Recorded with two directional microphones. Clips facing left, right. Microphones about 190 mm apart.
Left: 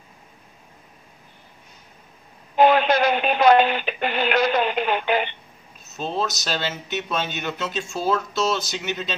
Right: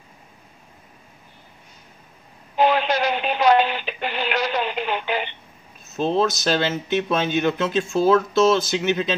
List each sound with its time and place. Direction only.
2.5 s radio: 55° left (ahead or behind)
6.1 s speech: 55° right (ahead or behind)